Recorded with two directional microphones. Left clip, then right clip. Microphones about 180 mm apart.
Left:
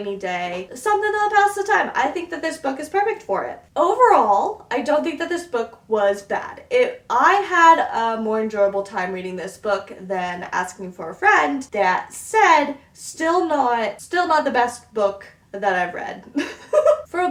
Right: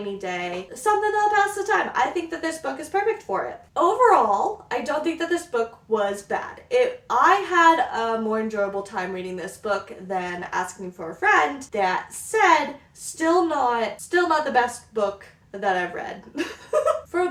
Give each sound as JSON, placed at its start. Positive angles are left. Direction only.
{"t": 0.2, "sound": "speech", "side_deg": 15}